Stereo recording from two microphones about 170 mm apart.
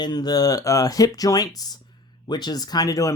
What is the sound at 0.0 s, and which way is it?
Speech, 25° left (ahead or behind).